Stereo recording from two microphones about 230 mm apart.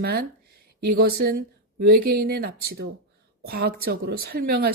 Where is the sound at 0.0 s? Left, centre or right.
Right.